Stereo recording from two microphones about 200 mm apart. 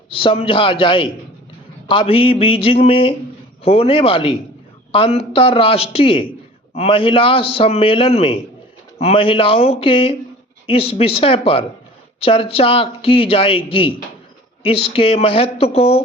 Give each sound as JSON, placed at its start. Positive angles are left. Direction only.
{"t": 0.2, "sound": "a man's voice", "side_deg": 25}